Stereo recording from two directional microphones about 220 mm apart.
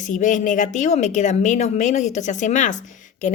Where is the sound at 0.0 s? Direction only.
35° left (ahead or behind).